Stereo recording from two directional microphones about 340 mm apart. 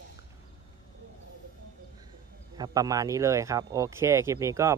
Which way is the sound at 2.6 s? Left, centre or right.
Centre.